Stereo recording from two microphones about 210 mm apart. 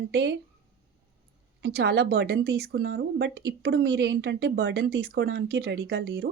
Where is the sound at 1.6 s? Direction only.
55° right (ahead or behind).